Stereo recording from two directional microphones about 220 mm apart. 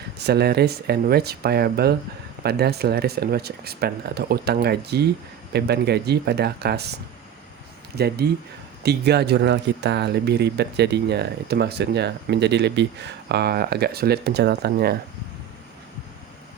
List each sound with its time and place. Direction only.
0.3 s speech: 45° right (ahead or behind)